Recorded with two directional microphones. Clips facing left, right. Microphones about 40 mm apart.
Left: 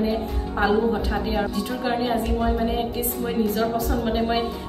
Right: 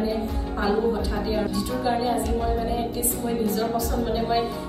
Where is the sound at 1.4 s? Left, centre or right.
Left.